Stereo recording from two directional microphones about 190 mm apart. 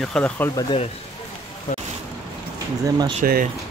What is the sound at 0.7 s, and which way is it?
Speech, 30° left (ahead or behind).